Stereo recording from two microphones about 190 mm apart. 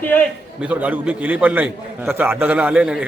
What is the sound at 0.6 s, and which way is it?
A man's voice, 5° right (ahead or behind).